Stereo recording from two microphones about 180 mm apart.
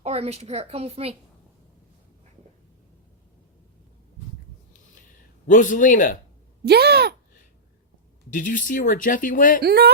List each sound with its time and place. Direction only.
0.0 s speech: 35° right (ahead or behind)
5.5 s speech: 45° left (ahead or behind)
6.7 s speech: 65° right (ahead or behind)
8.3 s speech: 45° left (ahead or behind)
9.6 s speech: 65° right (ahead or behind)